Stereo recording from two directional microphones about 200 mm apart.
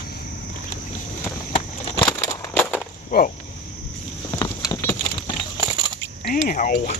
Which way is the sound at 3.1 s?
50° left (ahead or behind).